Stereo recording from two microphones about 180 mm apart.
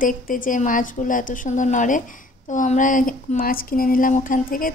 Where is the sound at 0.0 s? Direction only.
50° left (ahead or behind).